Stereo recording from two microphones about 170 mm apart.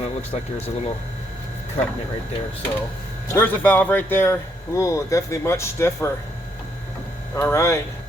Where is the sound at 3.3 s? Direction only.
10° left (ahead or behind).